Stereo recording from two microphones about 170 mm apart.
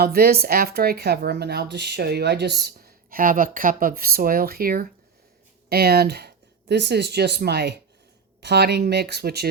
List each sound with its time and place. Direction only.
0.0 s speech: 65° right (ahead or behind)